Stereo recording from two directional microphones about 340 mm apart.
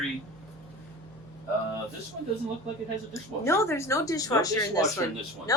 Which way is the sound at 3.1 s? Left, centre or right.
Centre.